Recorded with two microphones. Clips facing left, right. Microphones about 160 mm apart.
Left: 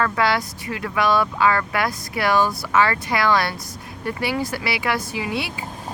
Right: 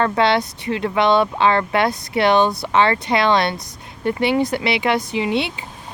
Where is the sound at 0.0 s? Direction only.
25° right (ahead or behind).